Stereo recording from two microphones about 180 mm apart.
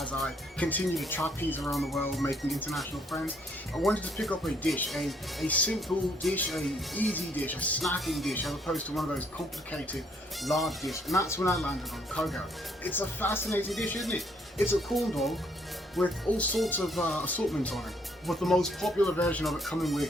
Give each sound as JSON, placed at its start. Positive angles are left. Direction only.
{"t": 0.2, "sound": "speech", "side_deg": 5}
{"t": 1.7, "sound": "speech", "side_deg": 0}
{"t": 10.4, "sound": "speech", "side_deg": 0}
{"t": 11.1, "sound": "speech", "side_deg": 15}
{"t": 12.8, "sound": "speech", "side_deg": 10}
{"t": 13.7, "sound": "speech", "side_deg": 0}